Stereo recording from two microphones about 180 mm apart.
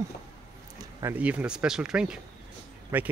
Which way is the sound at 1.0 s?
10° right (ahead or behind).